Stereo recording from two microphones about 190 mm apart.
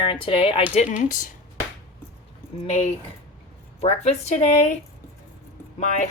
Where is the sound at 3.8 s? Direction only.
35° left (ahead or behind).